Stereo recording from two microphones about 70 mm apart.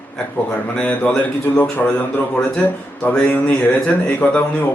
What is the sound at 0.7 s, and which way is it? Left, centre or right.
Speech, left.